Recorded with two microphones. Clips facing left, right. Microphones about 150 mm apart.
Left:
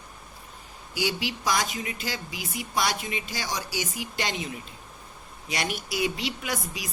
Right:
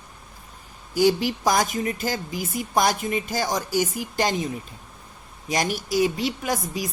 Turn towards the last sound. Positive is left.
turn(degrees=-40)  # may be behind; listen again after turning